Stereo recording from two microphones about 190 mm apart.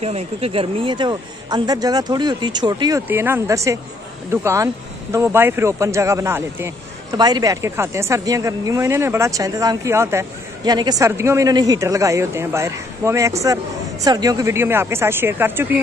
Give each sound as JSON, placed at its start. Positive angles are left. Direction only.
{"t": 0.0, "sound": "a man's voice", "side_deg": -30}